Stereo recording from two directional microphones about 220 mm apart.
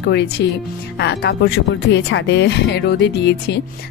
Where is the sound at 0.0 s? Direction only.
50° left (ahead or behind).